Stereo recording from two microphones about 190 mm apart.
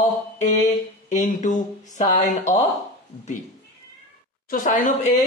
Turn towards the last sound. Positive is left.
turn(degrees=45)  # may be behind; listen again after turning